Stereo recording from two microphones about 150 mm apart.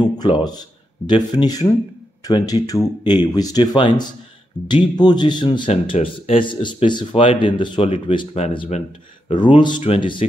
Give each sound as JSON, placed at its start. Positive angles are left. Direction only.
{"t": 0.0, "sound": "speech", "side_deg": 30}
{"t": 5.7, "sound": "speech", "side_deg": 45}
{"t": 8.4, "sound": "speech", "side_deg": 45}
{"t": 9.3, "sound": "speech", "side_deg": 30}